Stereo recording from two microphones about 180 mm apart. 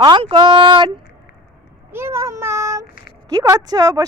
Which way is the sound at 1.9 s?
15° right (ahead or behind).